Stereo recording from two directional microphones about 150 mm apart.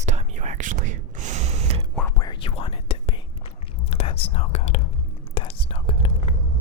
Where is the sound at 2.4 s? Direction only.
40° left (ahead or behind).